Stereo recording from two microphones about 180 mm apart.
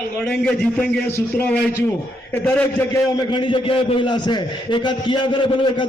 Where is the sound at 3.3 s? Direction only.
25° left (ahead or behind).